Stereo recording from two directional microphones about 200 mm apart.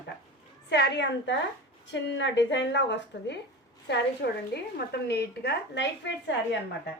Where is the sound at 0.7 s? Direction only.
60° left (ahead or behind).